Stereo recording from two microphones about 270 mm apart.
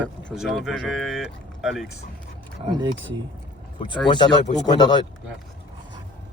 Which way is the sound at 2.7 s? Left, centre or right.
Centre.